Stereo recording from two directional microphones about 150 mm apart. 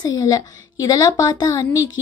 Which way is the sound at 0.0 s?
25° left (ahead or behind).